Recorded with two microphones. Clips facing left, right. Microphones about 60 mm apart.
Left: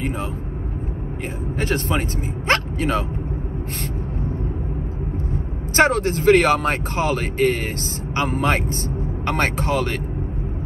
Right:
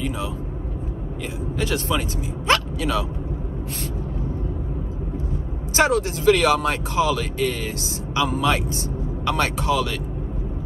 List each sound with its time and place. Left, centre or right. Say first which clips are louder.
0.0 s vehicle: left 1 dB; left
1.6 s speech: left 1 dB; left
5.3 s speech: left 3 dB; left